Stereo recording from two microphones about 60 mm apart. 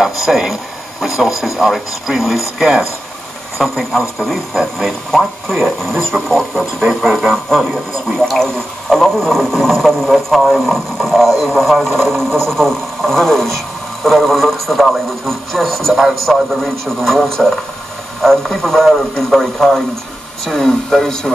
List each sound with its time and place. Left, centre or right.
0.0 s speech: centre